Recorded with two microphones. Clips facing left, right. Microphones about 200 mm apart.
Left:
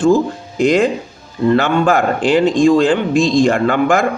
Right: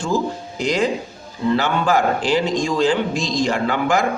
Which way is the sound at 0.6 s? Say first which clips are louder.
Left 7 dB; 55° left (ahead or behind).